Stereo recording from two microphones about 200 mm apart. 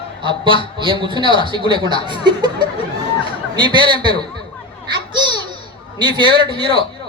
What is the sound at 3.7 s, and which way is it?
Speech, 25° right (ahead or behind).